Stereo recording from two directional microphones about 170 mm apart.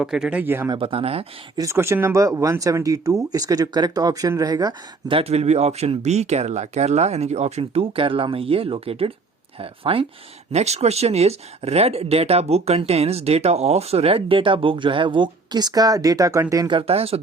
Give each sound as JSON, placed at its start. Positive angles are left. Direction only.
{"t": 0.0, "sound": "speech", "side_deg": -5}
{"t": 0.7, "sound": "speech", "side_deg": -30}
{"t": 1.5, "sound": "speech", "side_deg": -15}